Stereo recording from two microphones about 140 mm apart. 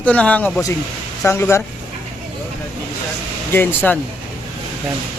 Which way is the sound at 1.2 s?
20° left (ahead or behind).